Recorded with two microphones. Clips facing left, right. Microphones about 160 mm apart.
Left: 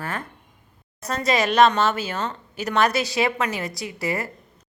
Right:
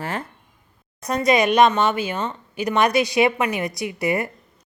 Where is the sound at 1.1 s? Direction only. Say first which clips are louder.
Right 4 dB; 15° right (ahead or behind).